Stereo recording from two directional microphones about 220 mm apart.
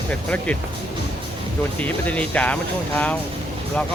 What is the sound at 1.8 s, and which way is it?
Speech, 5° left (ahead or behind).